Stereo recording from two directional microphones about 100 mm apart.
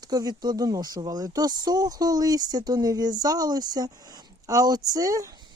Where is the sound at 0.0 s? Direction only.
40° right (ahead or behind).